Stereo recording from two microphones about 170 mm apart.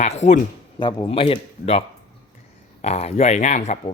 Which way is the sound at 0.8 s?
25° left (ahead or behind).